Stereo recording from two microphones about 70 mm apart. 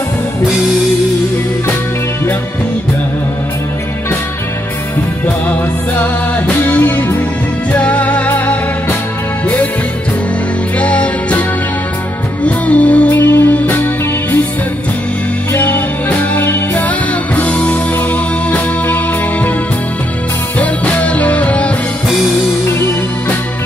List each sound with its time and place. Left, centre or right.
5.2 s music: left
10.8 s music: centre
12.4 s music: centre
15.5 s music: left
20.5 s music: left